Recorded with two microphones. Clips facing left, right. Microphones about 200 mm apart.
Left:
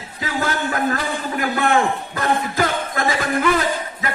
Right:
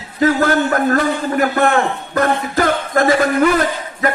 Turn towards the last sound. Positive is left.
turn(degrees=-50)  # may be behind; listen again after turning